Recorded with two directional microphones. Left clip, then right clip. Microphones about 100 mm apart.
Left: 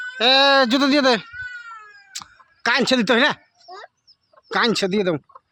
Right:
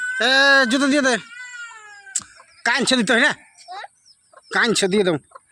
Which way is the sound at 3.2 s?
25° left (ahead or behind).